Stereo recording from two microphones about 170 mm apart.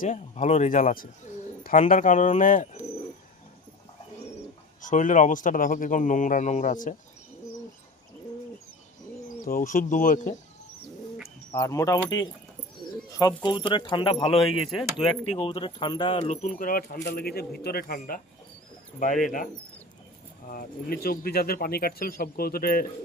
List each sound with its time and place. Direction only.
0.0 s speech: 50° left (ahead or behind)
4.8 s speech: 50° left (ahead or behind)
9.5 s speech: 55° left (ahead or behind)
11.5 s speech: 20° left (ahead or behind)
14.5 s speech: centre (ahead or behind)
15.0 s speech: 30° left (ahead or behind)
16.1 s speech: 40° left (ahead or behind)
20.5 s speech: 60° left (ahead or behind)